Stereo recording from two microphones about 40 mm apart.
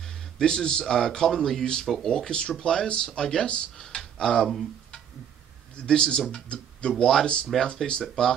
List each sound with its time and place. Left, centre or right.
0.0 s speech: centre